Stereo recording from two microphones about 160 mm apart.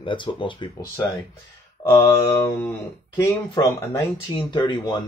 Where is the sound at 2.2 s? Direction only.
10° left (ahead or behind).